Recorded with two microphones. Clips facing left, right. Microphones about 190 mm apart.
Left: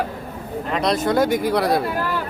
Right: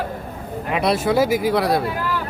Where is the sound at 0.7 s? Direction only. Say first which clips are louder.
Right 1 dB; 5° right (ahead or behind).